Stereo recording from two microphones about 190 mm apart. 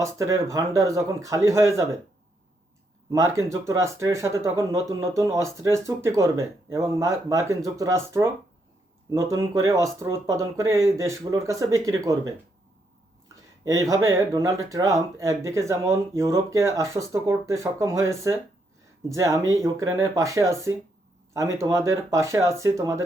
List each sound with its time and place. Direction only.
0.0 s speech: 15° right (ahead or behind)
3.1 s speech: 15° right (ahead or behind)